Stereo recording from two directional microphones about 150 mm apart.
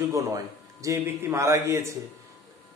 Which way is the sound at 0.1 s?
20° right (ahead or behind).